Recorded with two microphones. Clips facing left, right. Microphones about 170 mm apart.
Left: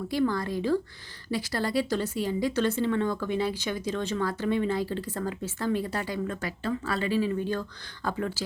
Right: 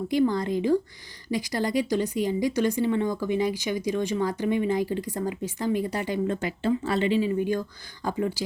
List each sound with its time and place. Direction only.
0.1 s a woman's voice: 20° right (ahead or behind)
6.2 s a woman's voice: 25° right (ahead or behind)